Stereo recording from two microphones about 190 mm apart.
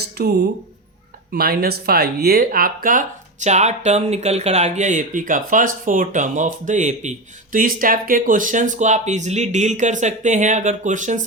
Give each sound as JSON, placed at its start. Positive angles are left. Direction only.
{"t": 0.2, "sound": "speech", "side_deg": -60}